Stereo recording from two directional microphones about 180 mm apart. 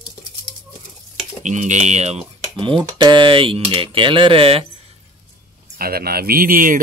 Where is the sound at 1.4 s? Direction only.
40° right (ahead or behind).